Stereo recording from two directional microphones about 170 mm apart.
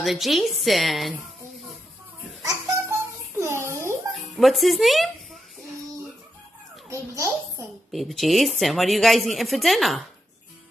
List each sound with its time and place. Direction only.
0.0 s a woman's voice: centre (ahead or behind)
2.4 s babbling: 15° right (ahead or behind)
4.1 s dog: centre (ahead or behind)
6.9 s babbling: 15° right (ahead or behind)
7.9 s a woman's voice: centre (ahead or behind)